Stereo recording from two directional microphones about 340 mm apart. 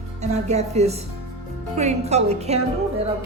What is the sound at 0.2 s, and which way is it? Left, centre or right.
A woman's voice, centre.